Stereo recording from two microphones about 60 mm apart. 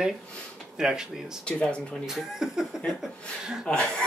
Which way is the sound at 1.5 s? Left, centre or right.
Centre.